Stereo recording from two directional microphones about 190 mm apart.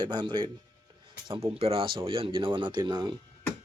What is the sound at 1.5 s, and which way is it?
Speech, 30° right (ahead or behind).